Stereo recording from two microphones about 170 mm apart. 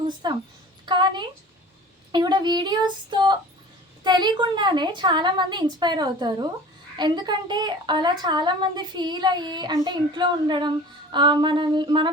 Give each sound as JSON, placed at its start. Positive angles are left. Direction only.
{"t": 0.2, "sound": "a woman's voice", "side_deg": -25}